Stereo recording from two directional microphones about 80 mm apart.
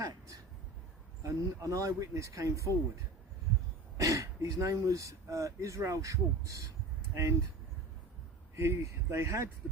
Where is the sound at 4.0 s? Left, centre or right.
Right.